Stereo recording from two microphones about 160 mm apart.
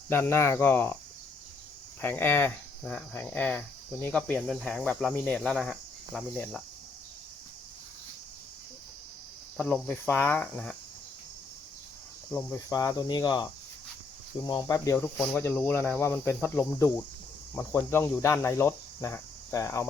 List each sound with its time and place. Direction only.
0.1 s speech: 15° left (ahead or behind)
2.0 s speech: 10° left (ahead or behind)
9.6 s speech: 10° left (ahead or behind)
12.3 s speech: 10° left (ahead or behind)
12.5 s cricket: 20° left (ahead or behind)
14.4 s speech: 25° left (ahead or behind)